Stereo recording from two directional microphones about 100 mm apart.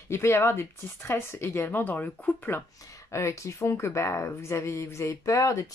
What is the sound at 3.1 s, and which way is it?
Speech, 30° left (ahead or behind).